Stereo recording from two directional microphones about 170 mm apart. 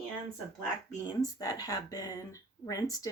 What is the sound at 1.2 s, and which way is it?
Speech, 20° left (ahead or behind).